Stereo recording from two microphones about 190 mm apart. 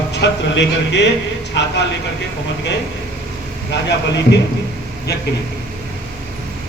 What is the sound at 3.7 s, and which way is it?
Speech, 65° left (ahead or behind).